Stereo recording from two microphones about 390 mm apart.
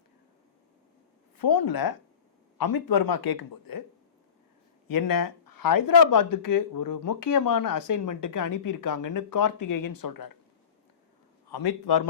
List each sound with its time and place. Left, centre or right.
1.4 s speech: left
4.9 s speech: left
11.4 s a man's voice: left